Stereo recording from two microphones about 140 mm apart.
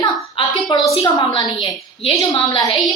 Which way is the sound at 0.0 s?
35° left (ahead or behind).